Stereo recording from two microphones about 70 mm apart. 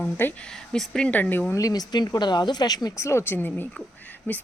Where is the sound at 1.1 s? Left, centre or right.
Left.